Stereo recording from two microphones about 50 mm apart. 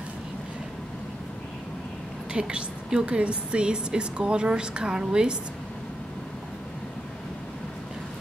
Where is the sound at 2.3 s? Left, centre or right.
Centre.